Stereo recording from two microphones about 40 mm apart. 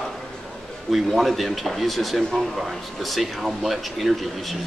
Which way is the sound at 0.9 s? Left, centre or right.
Centre.